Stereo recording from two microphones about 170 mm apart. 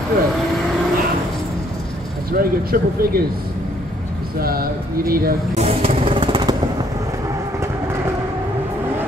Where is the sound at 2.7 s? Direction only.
60° right (ahead or behind).